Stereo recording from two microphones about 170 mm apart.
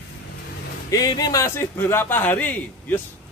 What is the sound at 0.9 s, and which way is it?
Speech, 20° left (ahead or behind).